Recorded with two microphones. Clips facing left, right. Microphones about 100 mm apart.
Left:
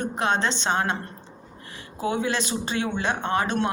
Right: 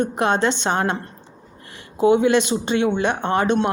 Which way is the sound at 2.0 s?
25° right (ahead or behind).